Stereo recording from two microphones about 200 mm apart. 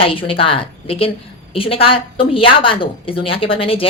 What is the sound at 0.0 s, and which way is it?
A woman's voice, 25° left (ahead or behind).